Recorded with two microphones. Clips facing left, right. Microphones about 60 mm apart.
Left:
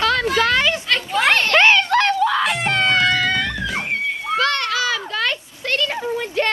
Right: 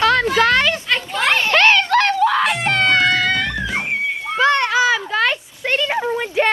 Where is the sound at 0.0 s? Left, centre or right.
Centre.